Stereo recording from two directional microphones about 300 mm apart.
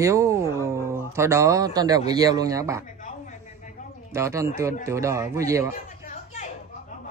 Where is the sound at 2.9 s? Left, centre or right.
Left.